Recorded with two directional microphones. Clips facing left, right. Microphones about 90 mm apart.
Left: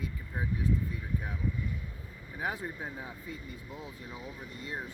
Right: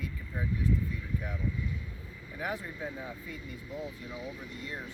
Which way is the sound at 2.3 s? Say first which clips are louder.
Left 1 dB; 30° left (ahead or behind).